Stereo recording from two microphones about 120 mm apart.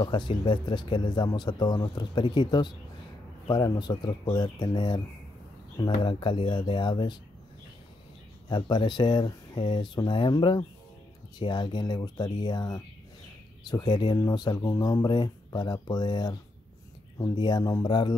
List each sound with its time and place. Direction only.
0.0 s speech: 40° left (ahead or behind)
6.0 s speech: 45° left (ahead or behind)
8.5 s speech: 40° left (ahead or behind)